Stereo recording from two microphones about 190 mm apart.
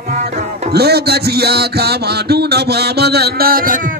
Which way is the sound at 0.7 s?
55° right (ahead or behind).